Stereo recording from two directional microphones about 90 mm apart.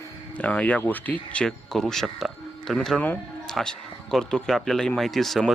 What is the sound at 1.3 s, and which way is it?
Speech, 10° left (ahead or behind).